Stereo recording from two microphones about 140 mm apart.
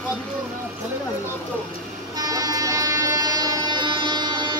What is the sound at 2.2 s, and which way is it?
Train, 25° right (ahead or behind).